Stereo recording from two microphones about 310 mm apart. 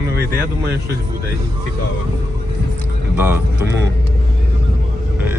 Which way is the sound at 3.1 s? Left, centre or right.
Centre.